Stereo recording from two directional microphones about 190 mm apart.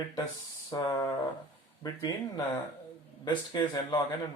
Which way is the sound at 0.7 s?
20° left (ahead or behind).